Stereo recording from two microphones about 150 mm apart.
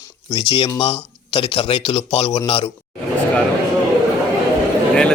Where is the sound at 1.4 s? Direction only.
40° left (ahead or behind).